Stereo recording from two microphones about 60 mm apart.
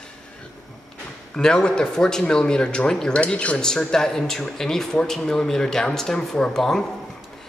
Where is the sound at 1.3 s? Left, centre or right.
Centre.